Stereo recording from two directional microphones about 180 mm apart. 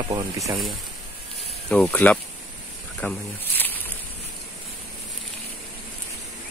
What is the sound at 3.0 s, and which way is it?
Snake, 10° left (ahead or behind).